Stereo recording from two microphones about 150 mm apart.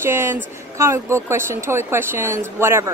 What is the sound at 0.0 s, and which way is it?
A woman's voice, 15° right (ahead or behind).